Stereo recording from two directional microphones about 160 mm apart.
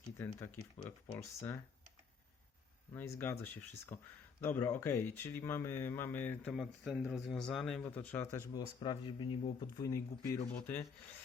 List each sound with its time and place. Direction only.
0.2 s speech: 15° left (ahead or behind)
2.9 s speech: 15° left (ahead or behind)